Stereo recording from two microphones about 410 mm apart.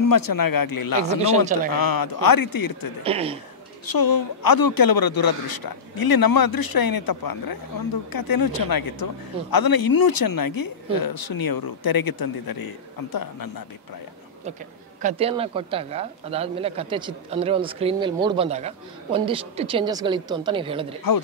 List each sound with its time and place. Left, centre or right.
0.0 s speech: left
1.0 s speech: centre
1.7 s a man's voice: left
3.0 s speech: centre
3.8 s a man's voice: left
15.0 s speech: centre
21.1 s a man's voice: left